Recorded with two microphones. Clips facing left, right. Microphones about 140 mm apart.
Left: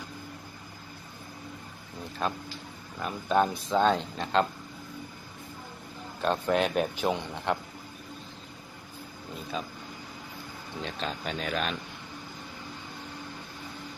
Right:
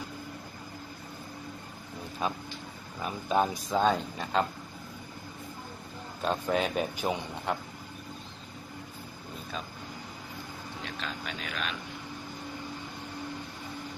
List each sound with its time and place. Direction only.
2.2 s speech: 5° right (ahead or behind)
6.2 s speech: centre (ahead or behind)
11.0 s speech: 40° left (ahead or behind)